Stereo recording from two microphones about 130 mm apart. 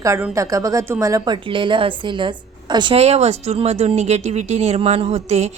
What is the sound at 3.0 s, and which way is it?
Speech, 55° right (ahead or behind).